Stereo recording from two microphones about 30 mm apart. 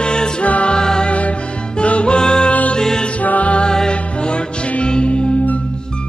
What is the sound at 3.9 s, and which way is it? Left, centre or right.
Music, left.